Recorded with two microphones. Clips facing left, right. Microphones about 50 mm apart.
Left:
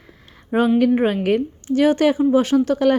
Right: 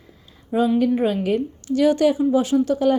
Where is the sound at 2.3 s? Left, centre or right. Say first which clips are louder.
Left 2 dB; left.